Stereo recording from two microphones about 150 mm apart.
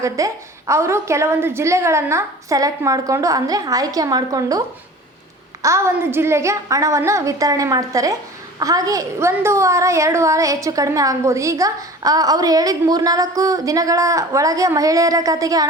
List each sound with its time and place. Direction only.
0.2 s a woman's voice: 20° right (ahead or behind)
5.6 s a woman's voice: 20° right (ahead or behind)